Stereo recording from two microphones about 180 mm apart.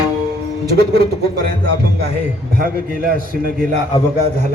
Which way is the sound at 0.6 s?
60° right (ahead or behind).